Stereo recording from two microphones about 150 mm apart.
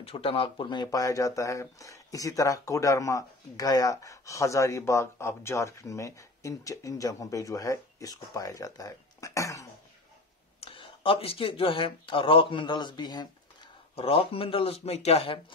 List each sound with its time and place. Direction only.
0.0 s speech: 40° left (ahead or behind); by 9.7 s 20° left (ahead or behind)
10.6 s speech: 35° left (ahead or behind)
13.9 s speech: 40° left (ahead or behind)